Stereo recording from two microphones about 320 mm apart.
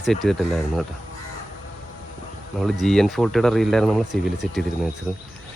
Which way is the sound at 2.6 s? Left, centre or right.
Centre.